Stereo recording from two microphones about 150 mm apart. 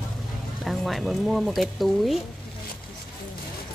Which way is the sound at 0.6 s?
Centre (ahead or behind).